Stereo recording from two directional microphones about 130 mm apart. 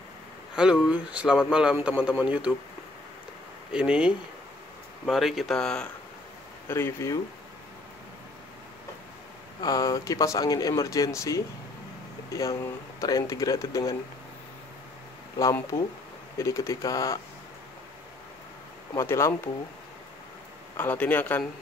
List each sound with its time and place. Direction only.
0.6 s a man's voice: 5° right (ahead or behind)
3.7 s a man's voice: 5° right (ahead or behind)
6.7 s speech: 20° left (ahead or behind)
9.6 s speech: 25° left (ahead or behind)
16.3 s speech: 25° left (ahead or behind)
18.9 s speech: 20° left (ahead or behind)
20.7 s speech: 15° left (ahead or behind)